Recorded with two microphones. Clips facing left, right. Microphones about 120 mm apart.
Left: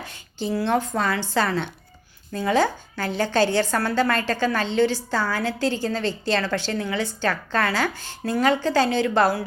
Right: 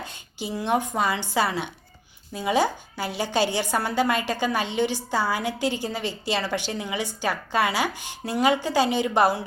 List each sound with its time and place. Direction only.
0.0 s speech: 15° right (ahead or behind)